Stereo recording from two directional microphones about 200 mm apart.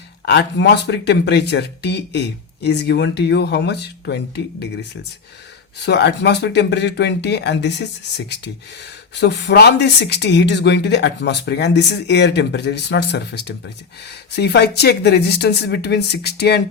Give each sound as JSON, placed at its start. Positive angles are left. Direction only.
{"t": 0.3, "sound": "speech", "side_deg": 60}
{"t": 5.8, "sound": "speech", "side_deg": 55}